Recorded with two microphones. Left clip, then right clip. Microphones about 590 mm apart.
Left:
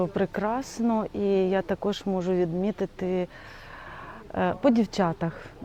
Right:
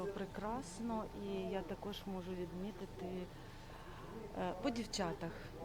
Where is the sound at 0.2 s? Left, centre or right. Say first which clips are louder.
Left 17 dB; left.